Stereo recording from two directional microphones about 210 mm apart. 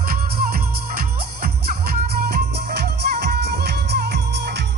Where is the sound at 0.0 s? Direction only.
45° right (ahead or behind).